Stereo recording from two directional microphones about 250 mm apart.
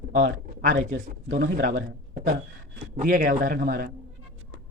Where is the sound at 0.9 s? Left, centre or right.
Right.